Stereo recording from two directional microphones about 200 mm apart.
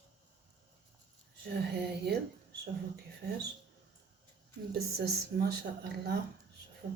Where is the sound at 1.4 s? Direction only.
55° right (ahead or behind).